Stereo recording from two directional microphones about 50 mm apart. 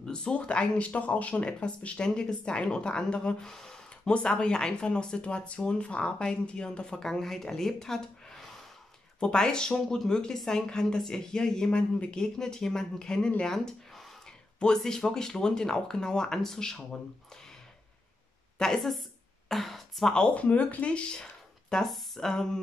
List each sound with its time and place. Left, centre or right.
0.0 s speech: centre
14.8 s speech: centre
18.8 s a woman's voice: centre
20.2 s speech: left; by 22.6 s centre